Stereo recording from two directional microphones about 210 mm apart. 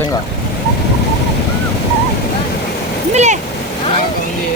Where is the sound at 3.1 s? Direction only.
35° right (ahead or behind).